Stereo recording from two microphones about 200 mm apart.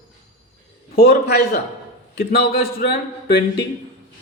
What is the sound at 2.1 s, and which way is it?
Speech, 50° left (ahead or behind).